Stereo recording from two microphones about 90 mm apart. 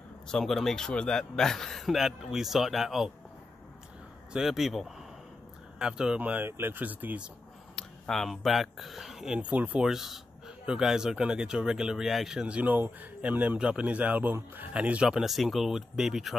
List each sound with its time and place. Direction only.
0.3 s a man's voice: 5° left (ahead or behind)
4.3 s a man's voice: 5° right (ahead or behind)
7.7 s speech: 5° left (ahead or behind); by 9.8 s 15° right (ahead or behind)
9.8 s speech: 5° right (ahead or behind)